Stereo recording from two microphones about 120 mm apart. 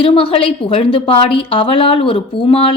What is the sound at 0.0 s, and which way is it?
A woman's voice, 50° left (ahead or behind).